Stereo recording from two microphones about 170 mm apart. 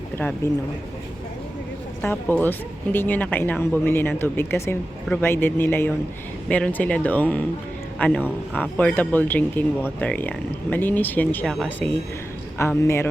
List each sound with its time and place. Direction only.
2.0 s speech: 10° left (ahead or behind)